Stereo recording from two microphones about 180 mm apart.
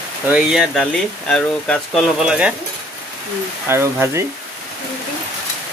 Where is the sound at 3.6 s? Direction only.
15° right (ahead or behind).